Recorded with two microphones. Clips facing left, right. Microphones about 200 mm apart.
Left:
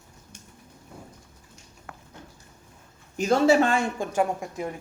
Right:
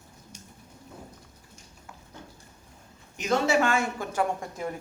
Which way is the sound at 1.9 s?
60° left (ahead or behind).